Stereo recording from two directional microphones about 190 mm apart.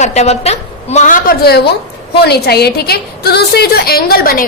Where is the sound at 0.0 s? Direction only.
35° left (ahead or behind).